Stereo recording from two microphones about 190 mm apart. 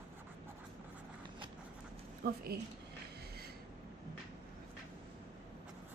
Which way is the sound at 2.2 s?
55° right (ahead or behind).